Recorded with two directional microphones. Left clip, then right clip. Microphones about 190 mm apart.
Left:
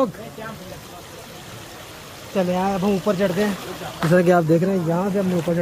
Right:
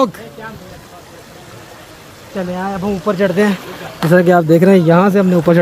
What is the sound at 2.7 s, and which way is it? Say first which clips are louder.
Speech: right 2 dB; centre (ahead or behind).